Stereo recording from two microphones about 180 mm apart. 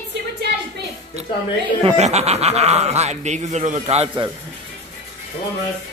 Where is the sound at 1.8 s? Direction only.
35° right (ahead or behind).